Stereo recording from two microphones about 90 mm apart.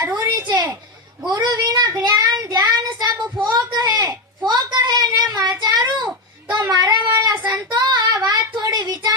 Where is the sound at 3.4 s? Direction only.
45° right (ahead or behind).